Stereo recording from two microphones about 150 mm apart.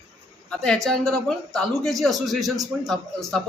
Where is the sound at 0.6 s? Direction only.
5° left (ahead or behind).